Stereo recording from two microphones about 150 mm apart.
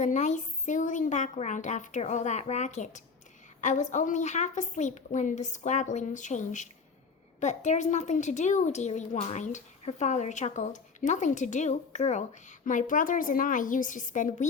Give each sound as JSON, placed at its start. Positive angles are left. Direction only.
{"t": 0.0, "sound": "a woman's voice", "side_deg": 55}